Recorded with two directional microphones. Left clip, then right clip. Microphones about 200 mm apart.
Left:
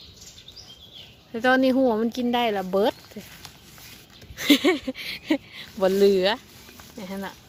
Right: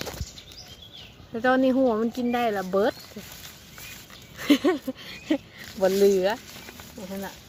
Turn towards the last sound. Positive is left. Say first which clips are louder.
# left 1 dB
turn(degrees=30)  # may be behind; listen again after turning